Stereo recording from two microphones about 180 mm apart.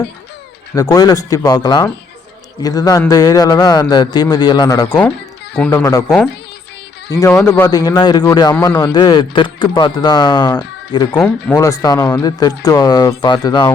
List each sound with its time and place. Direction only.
0.8 s speech: 20° left (ahead or behind)
4.9 s a man's voice: 10° left (ahead or behind)
5.8 s speech: 20° left (ahead or behind)
7.1 s a man's voice: 15° left (ahead or behind)
11.1 s speech: 10° left (ahead or behind); by 13.7 s 25° left (ahead or behind)